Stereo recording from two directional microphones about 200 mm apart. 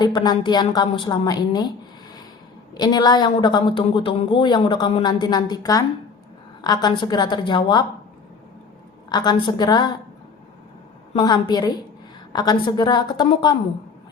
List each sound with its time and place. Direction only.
0.0 s a woman's voice: 20° left (ahead or behind)
2.7 s a woman's voice: 20° left (ahead or behind)
9.0 s a woman's voice: 20° left (ahead or behind)
11.1 s a woman's voice: 20° left (ahead or behind)